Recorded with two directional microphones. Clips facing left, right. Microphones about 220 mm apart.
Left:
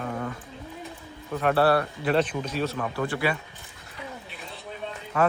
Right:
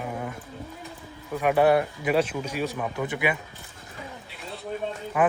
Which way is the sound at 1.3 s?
10° right (ahead or behind).